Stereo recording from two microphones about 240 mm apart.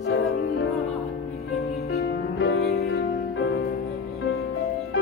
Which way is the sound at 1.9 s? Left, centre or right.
Left.